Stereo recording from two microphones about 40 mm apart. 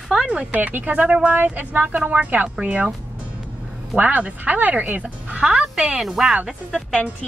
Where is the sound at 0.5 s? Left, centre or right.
Right.